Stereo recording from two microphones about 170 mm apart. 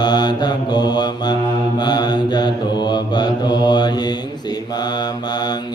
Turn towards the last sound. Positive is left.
turn(degrees=25)  # may be behind; listen again after turning